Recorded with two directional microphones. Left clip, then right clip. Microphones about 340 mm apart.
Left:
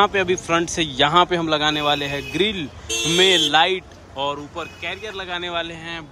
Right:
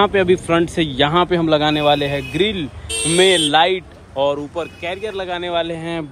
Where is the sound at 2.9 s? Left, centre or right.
Left.